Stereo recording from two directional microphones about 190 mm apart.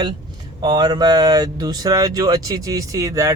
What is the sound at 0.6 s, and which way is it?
Speech, 20° right (ahead or behind).